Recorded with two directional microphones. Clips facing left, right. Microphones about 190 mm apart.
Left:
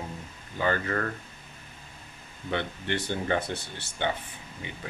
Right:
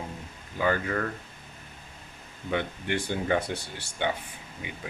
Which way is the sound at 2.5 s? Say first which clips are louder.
Right 1 dB; 10° right (ahead or behind).